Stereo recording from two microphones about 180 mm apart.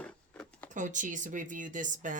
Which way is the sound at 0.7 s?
45° right (ahead or behind).